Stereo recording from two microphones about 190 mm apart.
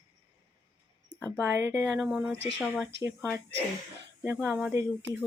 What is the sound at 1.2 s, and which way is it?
Speech, 10° right (ahead or behind).